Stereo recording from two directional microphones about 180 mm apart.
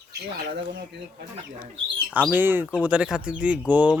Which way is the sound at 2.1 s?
10° right (ahead or behind).